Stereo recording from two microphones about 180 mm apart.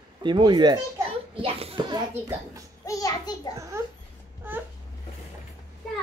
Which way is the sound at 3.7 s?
15° right (ahead or behind).